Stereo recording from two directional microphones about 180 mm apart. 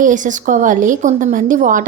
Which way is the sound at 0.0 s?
45° right (ahead or behind).